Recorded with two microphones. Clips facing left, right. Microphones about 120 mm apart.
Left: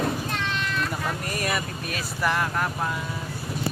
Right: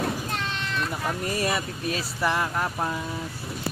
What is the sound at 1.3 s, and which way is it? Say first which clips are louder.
Speech: right 1 dB; 30° right (ahead or behind).